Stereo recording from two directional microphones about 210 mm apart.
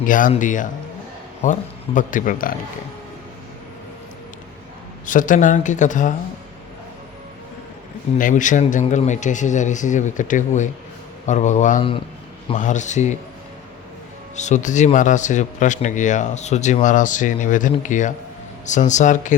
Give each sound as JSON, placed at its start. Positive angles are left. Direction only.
{"t": 0.0, "sound": "speech", "side_deg": 40}
{"t": 5.0, "sound": "speech", "side_deg": 40}
{"t": 8.2, "sound": "speech", "side_deg": 35}
{"t": 14.3, "sound": "speech", "side_deg": 35}